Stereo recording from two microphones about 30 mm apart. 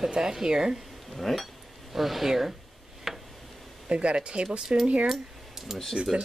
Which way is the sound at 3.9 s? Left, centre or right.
Right.